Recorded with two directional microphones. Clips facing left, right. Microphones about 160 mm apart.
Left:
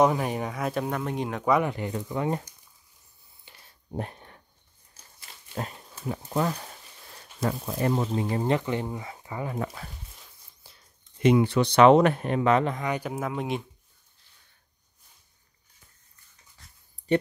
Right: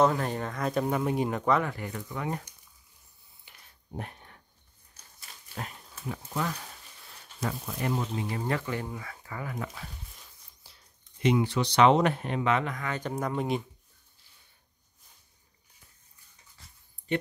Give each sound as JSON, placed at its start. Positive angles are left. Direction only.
{"t": 0.0, "sound": "speech", "side_deg": 15}
{"t": 1.4, "sound": "speech", "side_deg": 15}
{"t": 3.4, "sound": "a sound", "side_deg": 35}
{"t": 5.5, "sound": "speech", "side_deg": 35}
{"t": 8.5, "sound": "speech", "side_deg": 20}
{"t": 11.2, "sound": "speech", "side_deg": 60}
{"t": 12.7, "sound": "speech", "side_deg": 20}
{"t": 13.0, "sound": "speech", "side_deg": 5}